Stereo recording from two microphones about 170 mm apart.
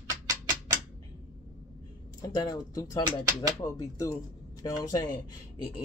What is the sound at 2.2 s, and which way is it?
Speech, 20° left (ahead or behind).